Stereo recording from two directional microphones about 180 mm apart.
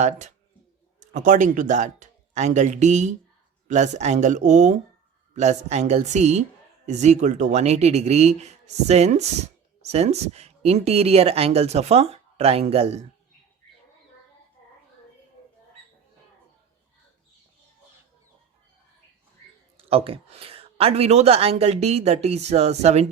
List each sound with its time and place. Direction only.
0.0 s speech: 40° right (ahead or behind)
19.7 s speech: 30° right (ahead or behind)